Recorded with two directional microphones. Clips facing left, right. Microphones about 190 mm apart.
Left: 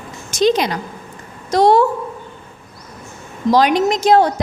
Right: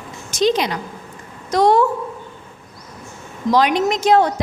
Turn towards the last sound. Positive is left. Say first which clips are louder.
# left 2 dB
turn(degrees=35)  # may be behind; listen again after turning